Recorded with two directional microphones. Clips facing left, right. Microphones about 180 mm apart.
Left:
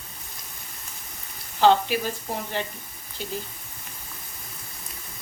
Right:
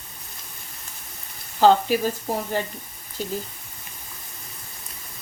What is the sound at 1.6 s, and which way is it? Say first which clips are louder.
Speech: right 2 dB; 40° right (ahead or behind).